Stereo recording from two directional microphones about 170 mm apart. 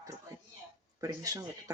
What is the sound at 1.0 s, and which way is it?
Speech, 15° right (ahead or behind).